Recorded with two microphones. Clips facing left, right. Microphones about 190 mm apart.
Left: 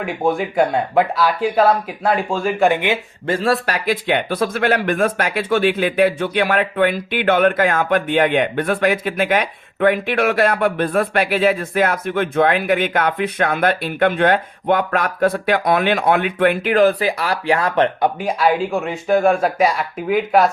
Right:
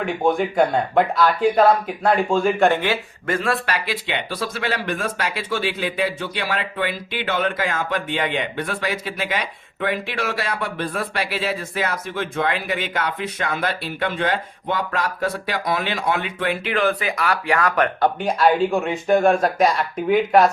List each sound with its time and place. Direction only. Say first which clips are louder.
0.0 s speech: even; 5° left (ahead or behind)
3.2 s speech: left 4 dB; 35° left (ahead or behind); by 16.7 s 55° left (ahead or behind)
16.7 s speech: left 6 dB; 35° left (ahead or behind)
18.0 s speech: even; 5° left (ahead or behind)